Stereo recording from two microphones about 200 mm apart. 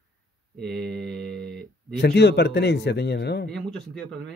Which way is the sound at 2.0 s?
55° left (ahead or behind).